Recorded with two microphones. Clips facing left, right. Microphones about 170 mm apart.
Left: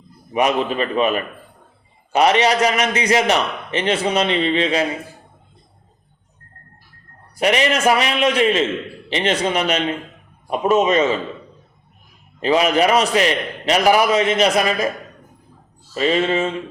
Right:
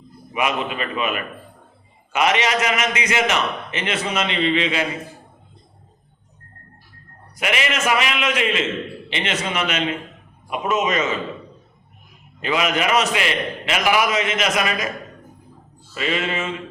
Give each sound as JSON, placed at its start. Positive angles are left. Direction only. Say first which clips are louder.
{"t": 0.3, "sound": "a man's voice", "louder": "left 5 dB", "side_deg": 35}
{"t": 7.3, "sound": "a man's voice", "louder": "left 6 dB", "side_deg": 35}
{"t": 12.4, "sound": "a man's voice", "louder": "left 6 dB", "side_deg": 35}
{"t": 16.0, "sound": "a man's voice", "louder": "left 6 dB", "side_deg": 35}